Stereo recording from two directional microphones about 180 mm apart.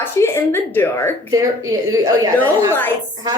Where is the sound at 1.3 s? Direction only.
20° right (ahead or behind).